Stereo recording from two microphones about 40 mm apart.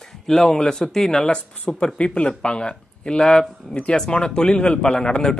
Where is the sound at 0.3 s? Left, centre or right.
Centre.